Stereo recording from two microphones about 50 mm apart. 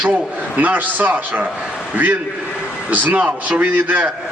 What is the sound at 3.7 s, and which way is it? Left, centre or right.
Speech, right.